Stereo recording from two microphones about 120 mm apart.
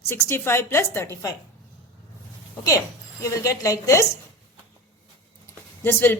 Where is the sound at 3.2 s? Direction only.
25° left (ahead or behind).